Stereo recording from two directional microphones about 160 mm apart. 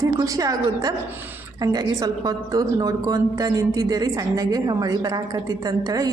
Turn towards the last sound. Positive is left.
turn(degrees=-25)  # may be behind; listen again after turning